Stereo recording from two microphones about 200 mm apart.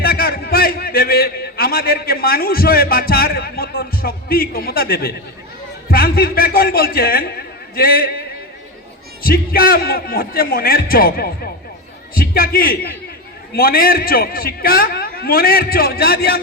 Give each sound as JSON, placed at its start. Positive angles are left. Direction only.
{"t": 0.0, "sound": "a man's voice", "side_deg": 50}
{"t": 9.2, "sound": "a man's voice", "side_deg": 50}